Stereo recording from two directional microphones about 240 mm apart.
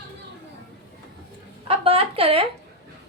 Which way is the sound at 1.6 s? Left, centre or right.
Right.